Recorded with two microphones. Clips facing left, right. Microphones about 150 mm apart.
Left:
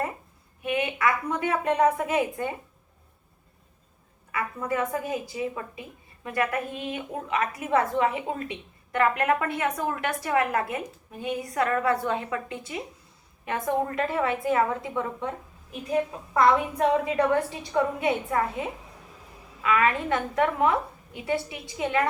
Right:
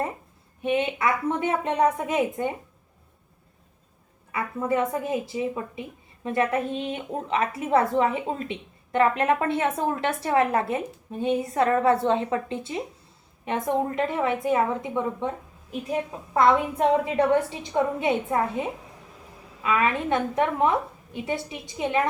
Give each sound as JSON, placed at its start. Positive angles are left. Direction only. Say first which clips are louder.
{"t": 0.6, "sound": "a woman's voice", "louder": "right 2 dB", "side_deg": -25}
{"t": 4.3, "sound": "a woman's voice", "louder": "right 3 dB", "side_deg": -25}
{"t": 19.6, "sound": "a woman's voice", "louder": "even", "side_deg": -20}